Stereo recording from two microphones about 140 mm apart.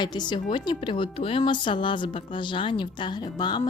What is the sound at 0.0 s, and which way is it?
Speech, 30° left (ahead or behind).